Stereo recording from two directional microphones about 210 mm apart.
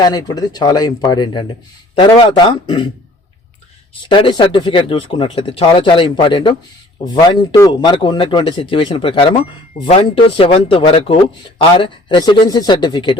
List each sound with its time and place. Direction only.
0.0 s speech: 20° left (ahead or behind)
4.0 s speech: 20° left (ahead or behind)